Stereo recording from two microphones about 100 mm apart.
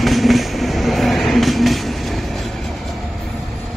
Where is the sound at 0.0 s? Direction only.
Centre (ahead or behind).